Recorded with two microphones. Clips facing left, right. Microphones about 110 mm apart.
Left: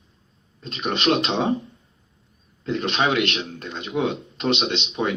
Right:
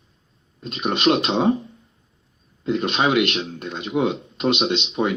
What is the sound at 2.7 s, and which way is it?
Speech, 15° right (ahead or behind).